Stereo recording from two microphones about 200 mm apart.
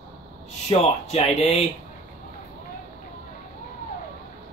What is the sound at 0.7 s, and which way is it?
Speech, 30° left (ahead or behind).